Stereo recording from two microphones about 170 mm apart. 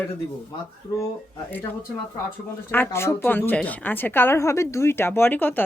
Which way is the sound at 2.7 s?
15° left (ahead or behind).